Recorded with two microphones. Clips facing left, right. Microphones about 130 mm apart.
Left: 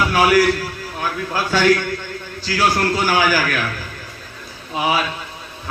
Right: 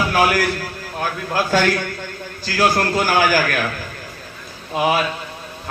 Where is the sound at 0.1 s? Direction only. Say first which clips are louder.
Left 3 dB; 45° right (ahead or behind).